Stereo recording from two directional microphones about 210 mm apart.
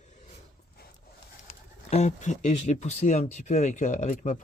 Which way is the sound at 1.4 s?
30° left (ahead or behind).